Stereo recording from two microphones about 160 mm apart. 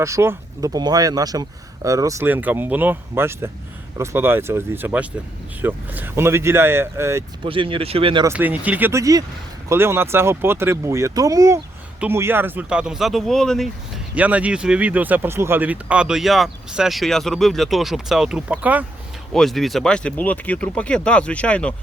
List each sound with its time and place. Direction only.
0.0 s speech: 15° right (ahead or behind)
7.4 s speech: 35° right (ahead or behind)
8.2 s speech: 10° right (ahead or behind)
14.2 s speech: 10° right (ahead or behind)
19.3 s speech: centre (ahead or behind)